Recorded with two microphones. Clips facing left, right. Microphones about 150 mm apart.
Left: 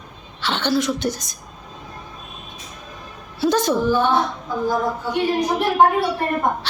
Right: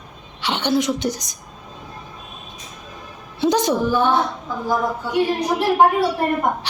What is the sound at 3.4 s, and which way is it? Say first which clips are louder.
Speech: right 1 dB; 15° right (ahead or behind).